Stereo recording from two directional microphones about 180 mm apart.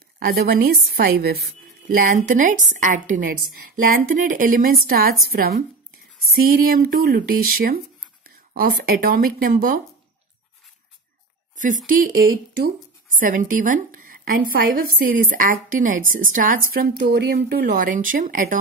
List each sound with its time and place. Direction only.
0.2 s a woman's voice: 55° right (ahead or behind)
11.5 s a woman's voice: 45° right (ahead or behind)